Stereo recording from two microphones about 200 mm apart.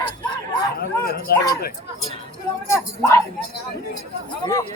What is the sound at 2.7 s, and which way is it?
Speech, 15° left (ahead or behind).